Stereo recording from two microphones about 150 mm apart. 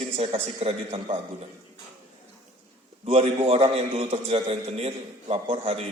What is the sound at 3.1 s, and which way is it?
A man's voice, 40° right (ahead or behind).